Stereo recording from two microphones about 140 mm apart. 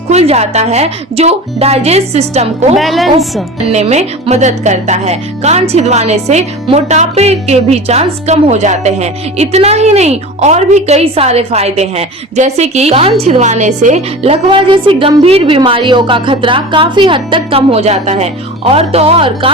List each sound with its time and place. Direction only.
0.1 s a woman's voice: 50° right (ahead or behind)
2.7 s a woman's voice: centre (ahead or behind)
3.7 s a woman's voice: 55° right (ahead or behind)
14.5 s a woman's voice: 35° right (ahead or behind)